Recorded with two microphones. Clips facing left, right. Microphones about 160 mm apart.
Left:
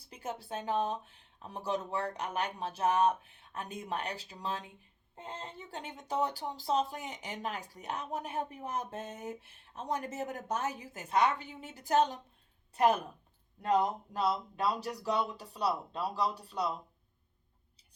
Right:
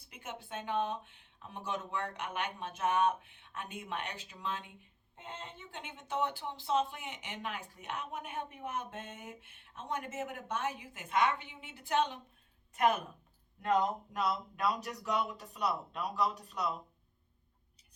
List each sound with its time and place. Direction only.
0.0 s speech: 35° left (ahead or behind)